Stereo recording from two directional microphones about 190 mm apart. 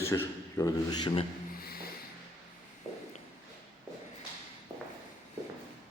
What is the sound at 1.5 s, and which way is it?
Vehicle, 55° left (ahead or behind).